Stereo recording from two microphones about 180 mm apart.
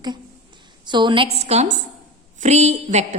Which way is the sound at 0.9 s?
25° right (ahead or behind).